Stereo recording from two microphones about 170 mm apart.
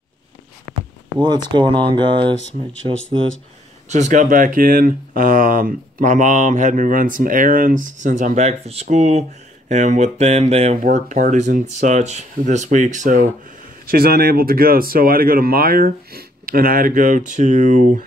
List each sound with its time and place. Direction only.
1.2 s speech: 25° right (ahead or behind)
3.9 s speech: 45° right (ahead or behind)
10.8 s speech: 50° right (ahead or behind)
13.8 s speech: 65° right (ahead or behind); by 18.0 s 45° right (ahead or behind)